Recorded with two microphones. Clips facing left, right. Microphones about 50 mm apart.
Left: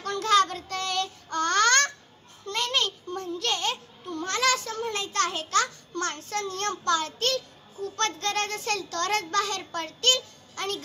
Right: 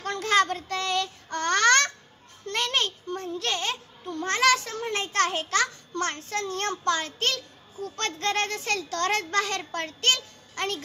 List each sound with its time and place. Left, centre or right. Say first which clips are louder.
0.0 s child singing: left 1 dB; right
1.3 s babbling: right 1 dB; right
2.4 s a sound: right 1 dB; right
8.0 s a child's voice: right 1 dB; right